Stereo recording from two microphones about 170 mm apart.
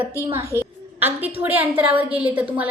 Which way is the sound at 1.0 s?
10° right (ahead or behind).